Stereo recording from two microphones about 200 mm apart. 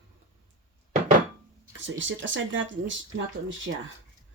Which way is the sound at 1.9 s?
70° right (ahead or behind).